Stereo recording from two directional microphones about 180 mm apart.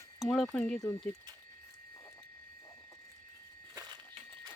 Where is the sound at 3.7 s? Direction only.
20° right (ahead or behind).